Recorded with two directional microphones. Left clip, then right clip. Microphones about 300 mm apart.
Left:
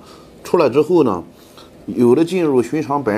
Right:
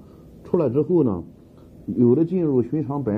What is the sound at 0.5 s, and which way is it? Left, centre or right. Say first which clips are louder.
Speech: left 7 dB; centre.